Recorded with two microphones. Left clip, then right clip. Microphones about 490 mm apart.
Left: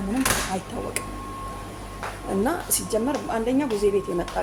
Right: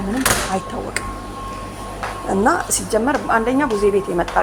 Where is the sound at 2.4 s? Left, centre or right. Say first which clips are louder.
Right 9 dB; left.